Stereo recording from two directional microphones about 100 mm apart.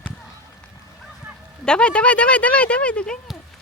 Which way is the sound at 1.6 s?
10° left (ahead or behind).